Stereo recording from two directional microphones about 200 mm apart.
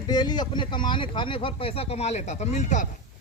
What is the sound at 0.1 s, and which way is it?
A man's voice, 20° left (ahead or behind).